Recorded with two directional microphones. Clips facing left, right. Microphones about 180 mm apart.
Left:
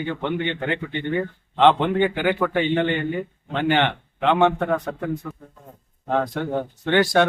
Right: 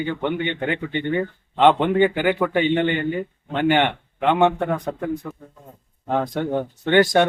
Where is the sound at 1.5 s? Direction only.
10° right (ahead or behind).